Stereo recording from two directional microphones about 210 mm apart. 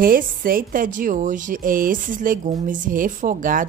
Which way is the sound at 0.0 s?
45° right (ahead or behind).